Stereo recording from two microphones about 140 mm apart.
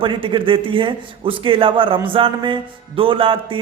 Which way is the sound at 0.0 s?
35° right (ahead or behind).